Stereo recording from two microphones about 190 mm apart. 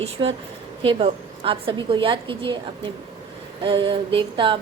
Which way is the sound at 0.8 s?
30° right (ahead or behind).